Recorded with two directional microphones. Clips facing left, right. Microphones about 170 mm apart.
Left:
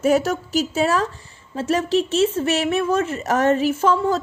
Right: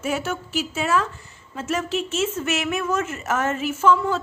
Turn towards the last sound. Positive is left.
turn(degrees=35)  # may be behind; listen again after turning